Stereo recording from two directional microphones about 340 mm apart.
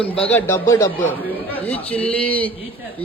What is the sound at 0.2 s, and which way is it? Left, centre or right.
A man's voice, centre.